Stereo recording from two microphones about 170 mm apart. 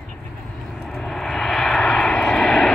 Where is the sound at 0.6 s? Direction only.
5° left (ahead or behind).